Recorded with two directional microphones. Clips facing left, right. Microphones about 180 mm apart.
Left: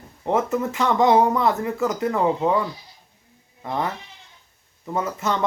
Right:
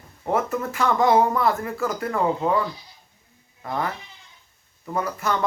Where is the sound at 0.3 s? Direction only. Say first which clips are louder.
Left 2 dB; 20° left (ahead or behind).